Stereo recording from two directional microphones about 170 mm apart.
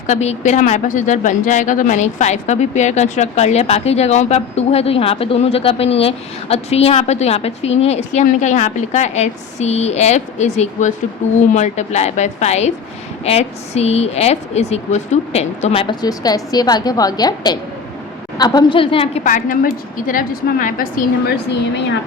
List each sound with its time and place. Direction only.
0.1 s a woman's voice: 40° left (ahead or behind)
19.2 s a woman's voice: 50° left (ahead or behind)